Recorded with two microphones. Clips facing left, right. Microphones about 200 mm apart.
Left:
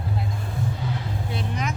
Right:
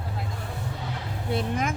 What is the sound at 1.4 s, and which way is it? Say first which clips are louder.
Vehicle: right 3 dB; 50° right (ahead or behind).